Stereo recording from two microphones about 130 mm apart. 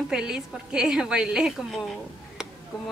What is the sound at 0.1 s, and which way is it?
A woman's voice, 5° right (ahead or behind).